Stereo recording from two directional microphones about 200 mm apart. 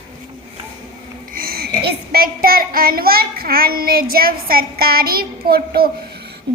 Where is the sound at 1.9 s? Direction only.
50° right (ahead or behind).